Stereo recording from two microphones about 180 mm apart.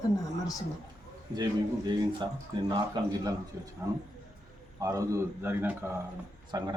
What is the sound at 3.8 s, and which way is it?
Speech, 15° right (ahead or behind).